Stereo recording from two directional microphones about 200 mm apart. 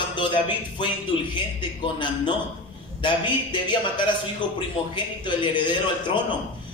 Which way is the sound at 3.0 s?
25° left (ahead or behind).